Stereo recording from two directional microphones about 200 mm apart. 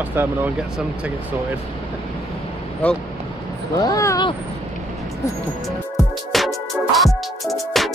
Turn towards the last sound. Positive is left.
turn(degrees=0)  # may be behind; listen again after turning